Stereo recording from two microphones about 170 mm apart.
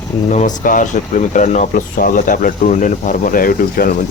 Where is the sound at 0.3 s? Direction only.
45° left (ahead or behind).